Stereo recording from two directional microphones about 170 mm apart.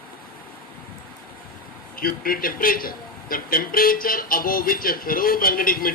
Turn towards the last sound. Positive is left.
turn(degrees=60)  # may be behind; listen again after turning